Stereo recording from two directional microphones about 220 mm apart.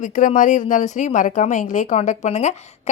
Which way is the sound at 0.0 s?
35° left (ahead or behind).